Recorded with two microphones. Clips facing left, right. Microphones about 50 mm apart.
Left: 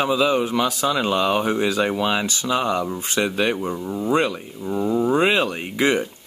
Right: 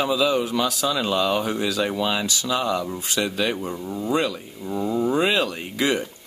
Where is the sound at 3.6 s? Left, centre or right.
Centre.